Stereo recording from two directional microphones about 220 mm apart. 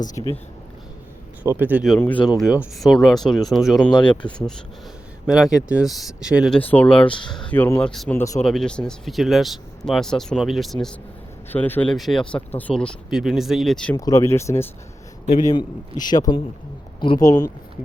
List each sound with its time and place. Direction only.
0.2 s a man's voice: 20° left (ahead or behind)
1.5 s speech: 10° right (ahead or behind)
7.0 s a man's voice: 20° left (ahead or behind)
7.5 s speech: 10° left (ahead or behind)
13.9 s a man's voice: 15° left (ahead or behind)